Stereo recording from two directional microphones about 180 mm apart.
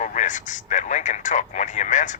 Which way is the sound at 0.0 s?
45° left (ahead or behind).